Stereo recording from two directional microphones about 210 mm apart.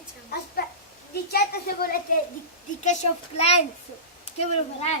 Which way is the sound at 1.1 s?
50° left (ahead or behind).